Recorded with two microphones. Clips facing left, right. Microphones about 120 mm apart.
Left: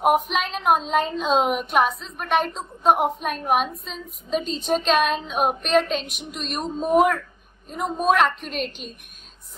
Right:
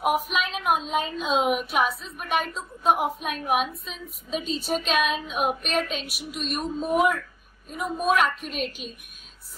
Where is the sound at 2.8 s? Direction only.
50° left (ahead or behind).